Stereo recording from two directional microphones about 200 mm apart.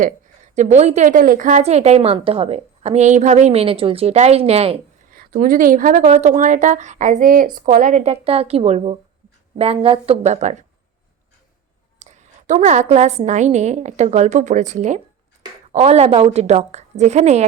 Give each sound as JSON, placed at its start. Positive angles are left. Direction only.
{"t": 0.5, "sound": "a woman's voice", "side_deg": -35}
{"t": 5.1, "sound": "a woman's voice", "side_deg": -45}
{"t": 11.9, "sound": "a woman's voice", "side_deg": -35}